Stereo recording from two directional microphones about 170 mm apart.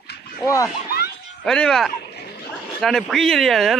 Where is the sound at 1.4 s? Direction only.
5° left (ahead or behind).